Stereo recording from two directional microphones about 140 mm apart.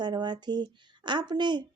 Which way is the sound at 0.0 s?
30° right (ahead or behind).